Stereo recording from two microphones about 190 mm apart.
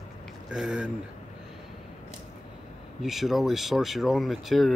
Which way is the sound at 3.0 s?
Centre (ahead or behind).